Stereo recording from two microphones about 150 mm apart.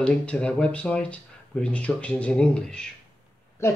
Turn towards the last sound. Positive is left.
turn(degrees=20)  # may be behind; listen again after turning